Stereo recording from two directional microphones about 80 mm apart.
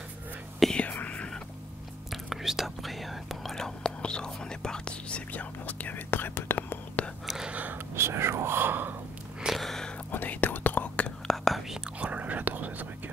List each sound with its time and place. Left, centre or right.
0.7 s whispering: centre
2.2 s whispering: centre; by 6.8 s left
7.2 s gasp: centre
7.5 s a sound: right
7.9 s whispering: right
9.4 s a sound: centre
10.1 s whispering: left
11.4 s whispering: centre
12.0 s whispering: centre